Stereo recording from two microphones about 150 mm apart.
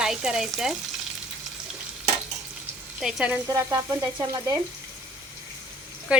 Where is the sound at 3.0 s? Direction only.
Centre (ahead or behind).